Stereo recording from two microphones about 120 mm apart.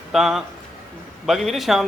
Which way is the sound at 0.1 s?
5° right (ahead or behind).